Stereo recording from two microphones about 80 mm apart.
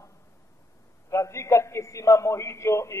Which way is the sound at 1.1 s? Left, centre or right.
Left.